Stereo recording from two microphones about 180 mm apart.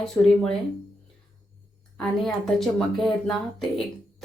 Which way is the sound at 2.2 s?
Centre (ahead or behind).